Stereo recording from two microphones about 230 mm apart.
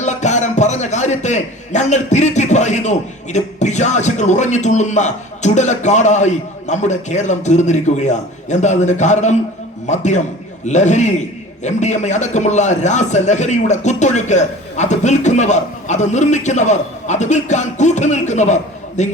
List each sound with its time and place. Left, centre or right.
0.0 s a man's voice: left